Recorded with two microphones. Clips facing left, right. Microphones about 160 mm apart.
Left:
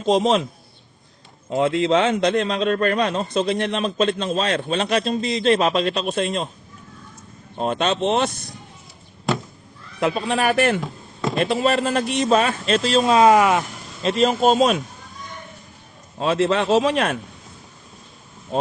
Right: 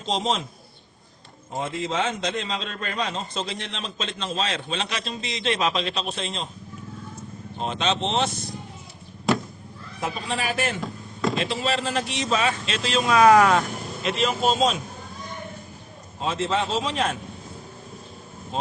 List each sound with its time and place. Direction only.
0.0 s a man's voice: 55° left (ahead or behind)
1.5 s a man's voice: 70° left (ahead or behind); by 6.5 s 55° left (ahead or behind)
7.6 s a man's voice: 55° left (ahead or behind)
10.0 s a man's voice: 65° left (ahead or behind); by 13.0 s 45° left (ahead or behind)
13.1 s speech: 25° left (ahead or behind)
14.0 s speech: 35° left (ahead or behind); by 14.8 s 55° left (ahead or behind)
16.2 s a man's voice: 65° left (ahead or behind)